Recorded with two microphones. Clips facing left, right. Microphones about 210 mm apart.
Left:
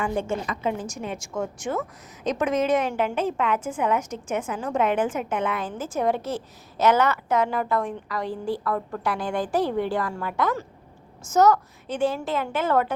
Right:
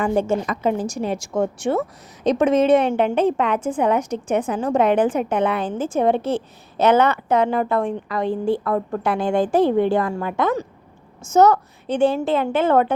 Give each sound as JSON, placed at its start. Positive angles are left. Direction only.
{"t": 0.0, "sound": "a woman's voice", "side_deg": -40}